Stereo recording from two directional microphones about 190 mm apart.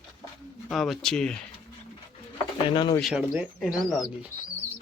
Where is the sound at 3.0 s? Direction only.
5° right (ahead or behind).